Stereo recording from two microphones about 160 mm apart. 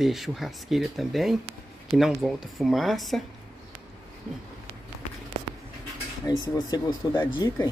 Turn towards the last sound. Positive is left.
turn(degrees=25)  # may be behind; listen again after turning